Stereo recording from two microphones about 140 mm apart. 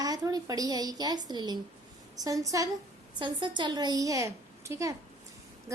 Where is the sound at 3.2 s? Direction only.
35° right (ahead or behind).